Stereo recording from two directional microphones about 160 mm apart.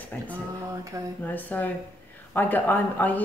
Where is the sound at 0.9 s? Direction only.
20° right (ahead or behind).